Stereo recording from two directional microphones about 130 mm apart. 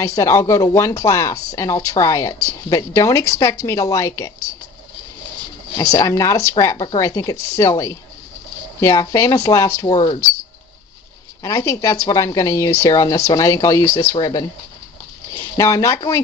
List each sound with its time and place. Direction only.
0.0 s speech: 25° left (ahead or behind)
5.8 s speech: 25° left (ahead or behind)
9.1 s speech: 25° left (ahead or behind)
9.8 s speech: 45° left (ahead or behind)
11.4 s speech: 25° left (ahead or behind)
15.5 s speech: 25° left (ahead or behind)